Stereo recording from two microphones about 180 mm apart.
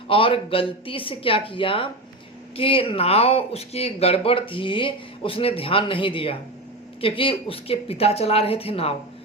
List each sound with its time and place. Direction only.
0.1 s speech: 30° left (ahead or behind)